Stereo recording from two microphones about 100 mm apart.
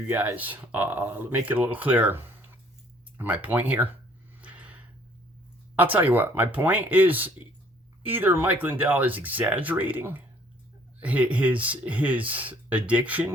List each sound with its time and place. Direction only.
0.1 s speech: 20° right (ahead or behind)
4.4 s a sound: 15° right (ahead or behind)
5.7 s speech: 15° right (ahead or behind)